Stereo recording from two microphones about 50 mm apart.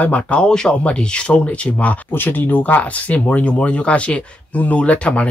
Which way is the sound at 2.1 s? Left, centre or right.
Left.